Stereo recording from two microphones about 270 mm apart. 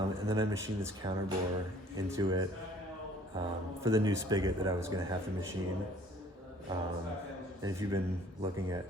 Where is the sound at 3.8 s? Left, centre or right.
Centre.